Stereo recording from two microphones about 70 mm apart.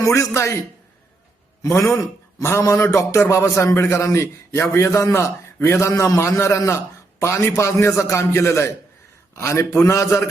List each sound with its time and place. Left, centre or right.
0.0 s a man's voice: left
1.6 s a man's voice: left